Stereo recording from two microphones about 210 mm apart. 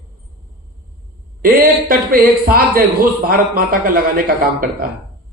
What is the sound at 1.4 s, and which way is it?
A man's voice, 40° right (ahead or behind).